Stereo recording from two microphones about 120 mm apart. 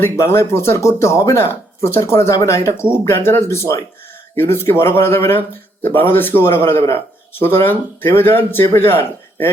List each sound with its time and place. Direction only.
0.0 s speech: 20° left (ahead or behind)